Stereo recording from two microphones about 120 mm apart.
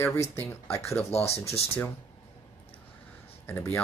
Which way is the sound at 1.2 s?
60° left (ahead or behind).